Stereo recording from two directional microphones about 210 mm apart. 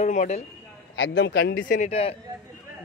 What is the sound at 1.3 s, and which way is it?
Speech, 45° left (ahead or behind).